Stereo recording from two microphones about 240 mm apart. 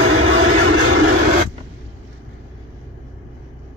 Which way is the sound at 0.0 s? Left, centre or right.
Right.